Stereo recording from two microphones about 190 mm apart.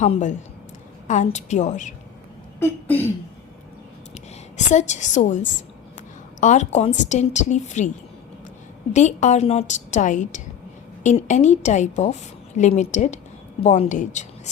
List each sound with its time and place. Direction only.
0.0 s a woman's voice: 40° left (ahead or behind)
2.6 s speech: 10° left (ahead or behind)
4.1 s a woman's voice: 40° left (ahead or behind)
8.9 s a woman's voice: 40° left (ahead or behind)